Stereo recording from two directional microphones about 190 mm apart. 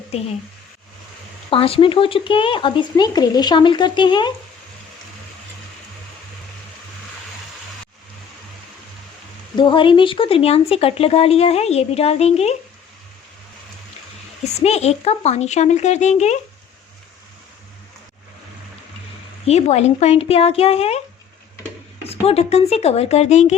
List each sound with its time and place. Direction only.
1.5 s speech: 30° left (ahead or behind)
9.6 s speech: 25° left (ahead or behind)
14.4 s speech: 35° left (ahead or behind)
19.5 s speech: 35° left (ahead or behind)
22.0 s speech: 35° left (ahead or behind)